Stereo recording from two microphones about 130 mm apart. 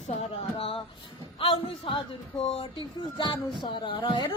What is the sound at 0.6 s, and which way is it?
A woman's voice, 45° left (ahead or behind).